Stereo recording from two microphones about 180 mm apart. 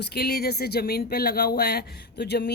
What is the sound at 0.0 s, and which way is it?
Speech, 65° left (ahead or behind).